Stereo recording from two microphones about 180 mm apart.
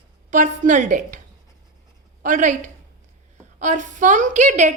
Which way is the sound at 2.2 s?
45° right (ahead or behind).